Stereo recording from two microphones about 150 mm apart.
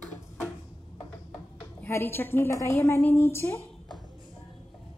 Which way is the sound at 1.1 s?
15° left (ahead or behind).